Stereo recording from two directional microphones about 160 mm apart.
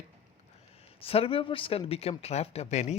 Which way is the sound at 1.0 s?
35° left (ahead or behind).